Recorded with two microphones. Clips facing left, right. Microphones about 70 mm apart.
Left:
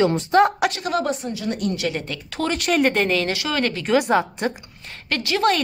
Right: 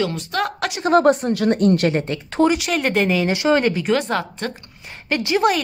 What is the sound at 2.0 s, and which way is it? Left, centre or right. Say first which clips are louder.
Speech: right 8 dB; right.